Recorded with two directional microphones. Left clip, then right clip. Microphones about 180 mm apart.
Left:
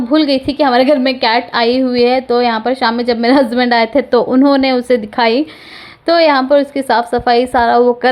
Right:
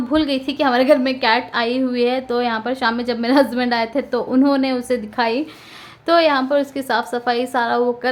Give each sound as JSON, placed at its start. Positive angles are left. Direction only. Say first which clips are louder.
{"t": 0.1, "sound": "a woman's voice", "louder": "left 7 dB", "side_deg": 30}